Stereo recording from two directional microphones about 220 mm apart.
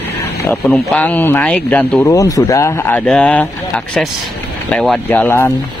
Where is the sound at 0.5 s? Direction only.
5° left (ahead or behind).